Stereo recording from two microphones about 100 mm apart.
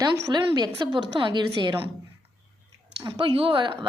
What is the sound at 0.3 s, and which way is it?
A woman's voice, 45° right (ahead or behind).